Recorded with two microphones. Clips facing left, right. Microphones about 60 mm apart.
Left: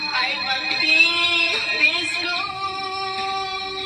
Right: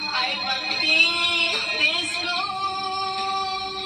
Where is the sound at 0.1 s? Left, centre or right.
Left.